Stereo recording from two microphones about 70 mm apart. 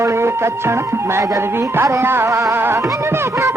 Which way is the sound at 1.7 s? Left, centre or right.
Right.